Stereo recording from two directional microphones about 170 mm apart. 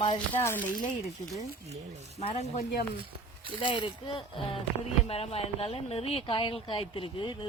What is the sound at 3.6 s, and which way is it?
Speech, 30° left (ahead or behind).